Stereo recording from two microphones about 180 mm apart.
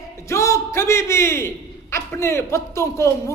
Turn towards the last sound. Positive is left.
turn(degrees=15)  # may be behind; listen again after turning